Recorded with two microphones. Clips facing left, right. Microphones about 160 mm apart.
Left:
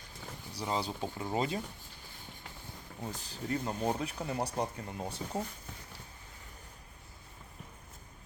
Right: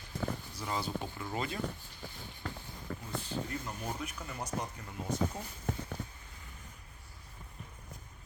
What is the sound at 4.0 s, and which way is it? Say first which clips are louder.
Speech: left 6 dB; 30° left (ahead or behind).